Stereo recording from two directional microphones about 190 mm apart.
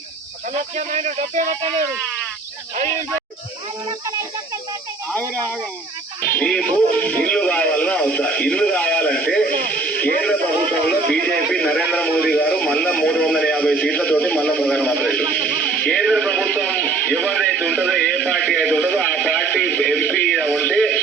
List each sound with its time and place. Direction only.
0.8 s speech: 40° right (ahead or behind)
6.2 s speech: 10° left (ahead or behind)
9.9 s radio: 50° left (ahead or behind)
10.2 s a man's voice: 5° left (ahead or behind)
20.4 s a sound: 5° left (ahead or behind)